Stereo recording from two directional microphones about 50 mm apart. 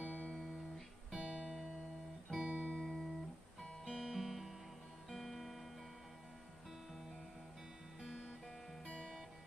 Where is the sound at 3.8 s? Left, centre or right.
Centre.